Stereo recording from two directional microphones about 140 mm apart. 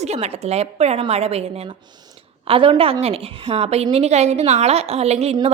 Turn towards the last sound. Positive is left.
turn(degrees=-50)  # may be behind; listen again after turning